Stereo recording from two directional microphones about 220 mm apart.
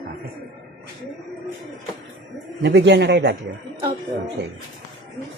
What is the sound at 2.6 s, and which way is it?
Speech, 50° right (ahead or behind).